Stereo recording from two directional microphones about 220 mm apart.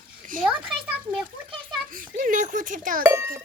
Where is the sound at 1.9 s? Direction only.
40° right (ahead or behind).